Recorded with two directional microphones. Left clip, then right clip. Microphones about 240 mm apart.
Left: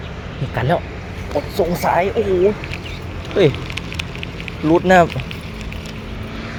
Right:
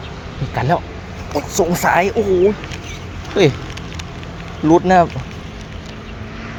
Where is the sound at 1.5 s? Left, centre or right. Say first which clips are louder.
Right 3 dB; right.